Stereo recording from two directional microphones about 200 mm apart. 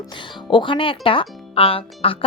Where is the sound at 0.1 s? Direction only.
25° left (ahead or behind).